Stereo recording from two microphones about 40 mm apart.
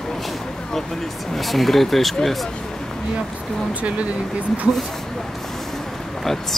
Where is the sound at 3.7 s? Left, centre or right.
Right.